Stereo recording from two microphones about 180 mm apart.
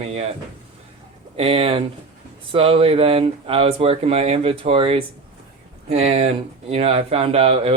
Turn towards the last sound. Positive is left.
turn(degrees=-35)  # may be behind; listen again after turning